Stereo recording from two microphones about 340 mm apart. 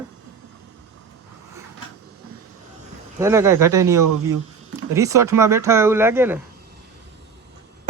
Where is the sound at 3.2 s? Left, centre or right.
Centre.